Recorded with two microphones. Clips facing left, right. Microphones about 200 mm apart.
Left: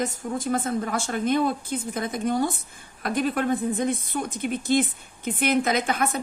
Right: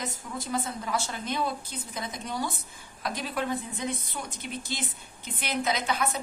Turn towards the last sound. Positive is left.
turn(degrees=50)  # may be behind; listen again after turning